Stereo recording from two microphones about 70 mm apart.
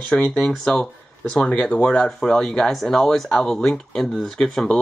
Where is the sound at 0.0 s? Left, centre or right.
Centre.